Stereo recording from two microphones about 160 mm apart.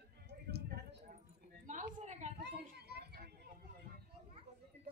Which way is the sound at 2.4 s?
90° right.